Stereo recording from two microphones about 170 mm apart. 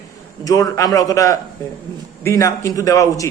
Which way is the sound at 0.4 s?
20° left (ahead or behind).